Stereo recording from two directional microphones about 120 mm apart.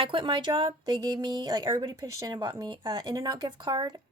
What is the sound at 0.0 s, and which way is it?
A woman's voice, 45° right (ahead or behind).